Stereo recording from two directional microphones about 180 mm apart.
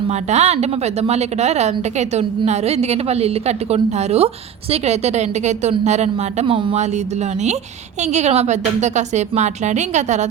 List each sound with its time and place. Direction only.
0.1 s a woman's voice: 40° right (ahead or behind)